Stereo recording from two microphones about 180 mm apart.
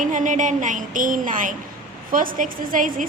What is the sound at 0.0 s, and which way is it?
A woman's voice, 45° right (ahead or behind).